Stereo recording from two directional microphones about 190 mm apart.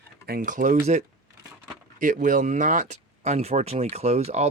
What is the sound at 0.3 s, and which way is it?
Speech, 45° right (ahead or behind).